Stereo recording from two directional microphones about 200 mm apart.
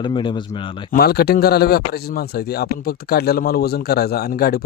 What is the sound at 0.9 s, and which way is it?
A man's voice, 50° left (ahead or behind).